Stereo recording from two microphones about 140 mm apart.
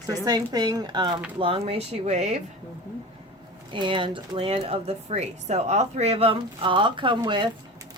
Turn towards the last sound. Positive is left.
turn(degrees=-35)  # may be behind; listen again after turning